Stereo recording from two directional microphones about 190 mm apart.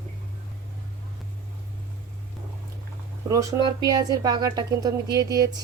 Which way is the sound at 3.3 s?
15° right (ahead or behind).